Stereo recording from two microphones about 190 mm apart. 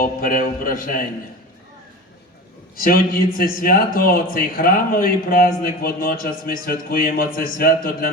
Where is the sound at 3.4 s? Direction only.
50° left (ahead or behind).